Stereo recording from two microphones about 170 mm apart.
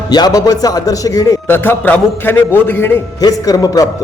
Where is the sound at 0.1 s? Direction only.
25° left (ahead or behind).